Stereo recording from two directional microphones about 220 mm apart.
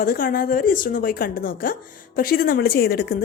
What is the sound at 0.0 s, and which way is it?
A woman's voice, 40° left (ahead or behind).